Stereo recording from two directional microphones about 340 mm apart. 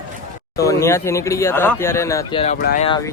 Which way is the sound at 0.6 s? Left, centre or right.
Centre.